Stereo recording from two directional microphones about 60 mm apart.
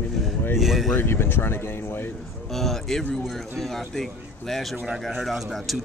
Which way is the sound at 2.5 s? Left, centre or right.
Centre.